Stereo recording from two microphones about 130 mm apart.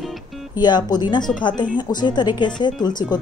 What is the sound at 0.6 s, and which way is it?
A woman's voice, 35° left (ahead or behind).